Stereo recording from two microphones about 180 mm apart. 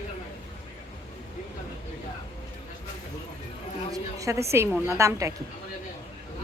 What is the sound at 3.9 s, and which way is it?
A woman's voice, 20° right (ahead or behind).